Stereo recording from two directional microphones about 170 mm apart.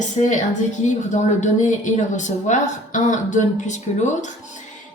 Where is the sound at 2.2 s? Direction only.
45° left (ahead or behind).